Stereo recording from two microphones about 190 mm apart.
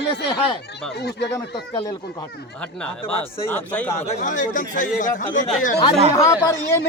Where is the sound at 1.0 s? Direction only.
60° left (ahead or behind).